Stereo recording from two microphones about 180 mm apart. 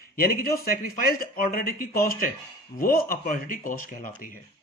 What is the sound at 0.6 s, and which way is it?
Speech, 55° left (ahead or behind).